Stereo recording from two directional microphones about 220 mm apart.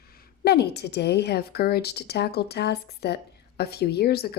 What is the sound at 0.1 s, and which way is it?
A woman's voice, 45° left (ahead or behind).